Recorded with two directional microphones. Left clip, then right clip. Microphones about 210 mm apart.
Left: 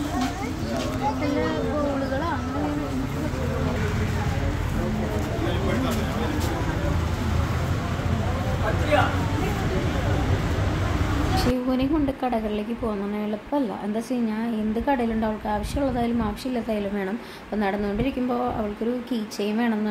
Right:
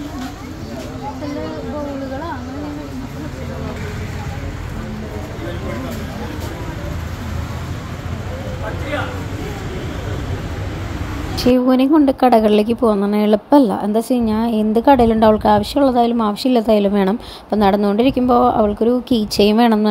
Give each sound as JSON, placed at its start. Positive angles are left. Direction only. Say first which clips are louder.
{"t": 11.3, "sound": "a woman's voice", "louder": "right 12 dB", "side_deg": -30}